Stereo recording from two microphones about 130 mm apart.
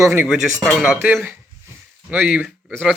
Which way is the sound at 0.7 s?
5° right (ahead or behind).